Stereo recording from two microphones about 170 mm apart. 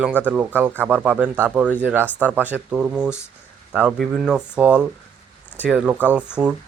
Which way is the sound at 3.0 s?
15° left (ahead or behind).